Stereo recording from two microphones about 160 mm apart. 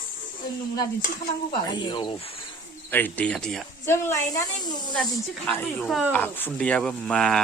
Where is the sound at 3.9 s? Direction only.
15° left (ahead or behind).